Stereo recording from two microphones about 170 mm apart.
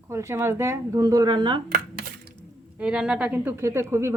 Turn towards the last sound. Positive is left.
turn(degrees=-15)  # may be behind; listen again after turning